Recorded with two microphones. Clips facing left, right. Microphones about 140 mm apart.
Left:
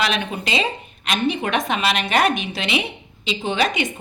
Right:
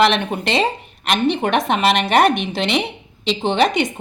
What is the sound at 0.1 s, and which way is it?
A woman's voice, 70° right (ahead or behind).